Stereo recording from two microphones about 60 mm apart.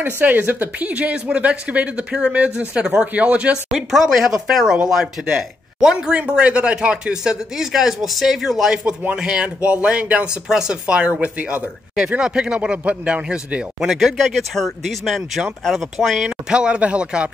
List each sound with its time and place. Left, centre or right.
0.0 s speech: right
3.7 s speech: centre
13.7 s speech: centre
16.3 s speech: centre